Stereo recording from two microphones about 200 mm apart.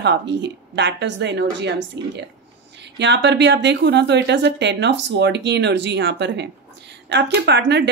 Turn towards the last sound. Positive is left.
turn(degrees=-60)  # may be behind; listen again after turning